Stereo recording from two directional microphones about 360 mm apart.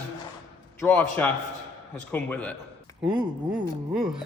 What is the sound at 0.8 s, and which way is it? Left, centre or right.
A man's voice, centre.